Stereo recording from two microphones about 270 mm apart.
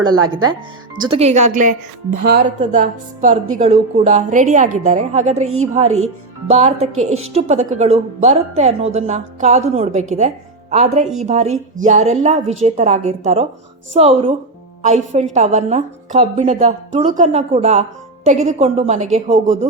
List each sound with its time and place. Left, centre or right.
0.2 s speech: right
1.0 s a woman's voice: right